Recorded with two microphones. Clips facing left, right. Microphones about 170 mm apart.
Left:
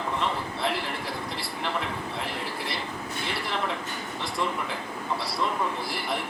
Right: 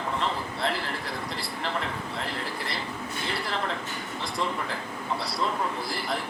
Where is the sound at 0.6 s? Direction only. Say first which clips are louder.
Even; centre (ahead or behind).